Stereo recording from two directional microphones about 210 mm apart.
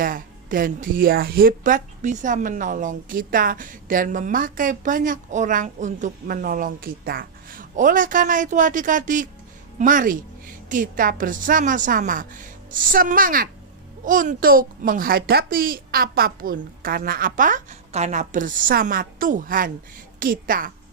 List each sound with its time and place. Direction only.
0.0 s a woman's voice: 40° right (ahead or behind)